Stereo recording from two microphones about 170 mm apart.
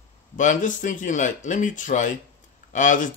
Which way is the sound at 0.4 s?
45° left (ahead or behind).